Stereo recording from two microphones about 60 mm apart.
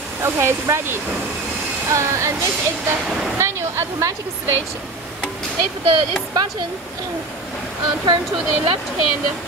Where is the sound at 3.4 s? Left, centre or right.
Right.